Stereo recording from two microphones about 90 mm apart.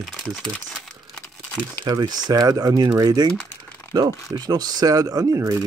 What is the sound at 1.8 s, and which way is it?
Speech, 50° right (ahead or behind).